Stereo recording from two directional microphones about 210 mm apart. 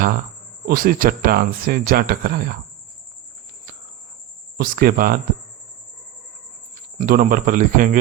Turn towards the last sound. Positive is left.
turn(degrees=-40)  # may be behind; listen again after turning